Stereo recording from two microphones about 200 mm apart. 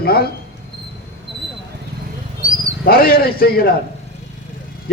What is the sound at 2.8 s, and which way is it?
Speech, 50° left (ahead or behind).